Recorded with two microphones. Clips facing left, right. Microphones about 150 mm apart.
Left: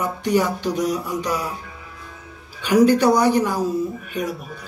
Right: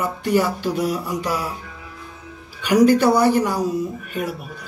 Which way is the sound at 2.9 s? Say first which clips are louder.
Right 1 dB; 15° left (ahead or behind).